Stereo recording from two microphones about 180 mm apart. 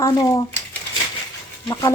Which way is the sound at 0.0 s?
20° left (ahead or behind).